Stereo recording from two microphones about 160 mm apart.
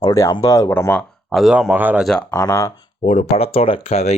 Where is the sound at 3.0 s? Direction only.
40° left (ahead or behind).